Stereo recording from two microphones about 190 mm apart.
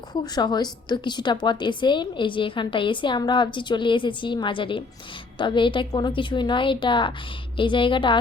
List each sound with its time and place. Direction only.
0.1 s a woman's voice: 20° left (ahead or behind)